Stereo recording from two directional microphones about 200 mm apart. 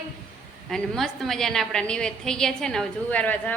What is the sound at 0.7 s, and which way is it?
A woman's voice, centre (ahead or behind).